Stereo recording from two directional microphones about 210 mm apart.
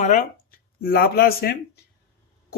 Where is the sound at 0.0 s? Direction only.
35° left (ahead or behind).